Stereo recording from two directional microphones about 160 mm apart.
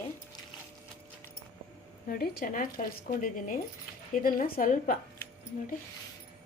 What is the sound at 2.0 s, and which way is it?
A woman's voice, 70° left (ahead or behind).